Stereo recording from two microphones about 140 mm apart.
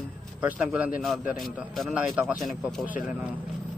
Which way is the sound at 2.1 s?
15° right (ahead or behind).